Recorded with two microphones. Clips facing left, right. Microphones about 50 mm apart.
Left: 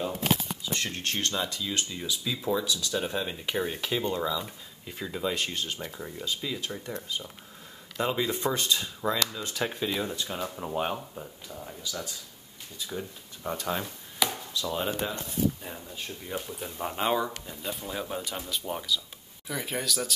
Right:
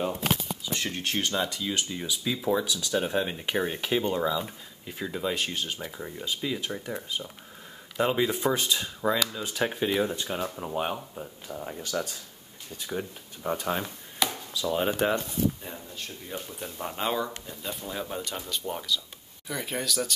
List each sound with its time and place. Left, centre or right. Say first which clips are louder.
0.3 s speech: left 1 dB; centre
10.5 s speech: even; centre
11.4 s speech: right 5 dB; right
11.8 s speech: right 5 dB; right
13.4 s speech: right 2 dB; centre
15.6 s speech: even; centre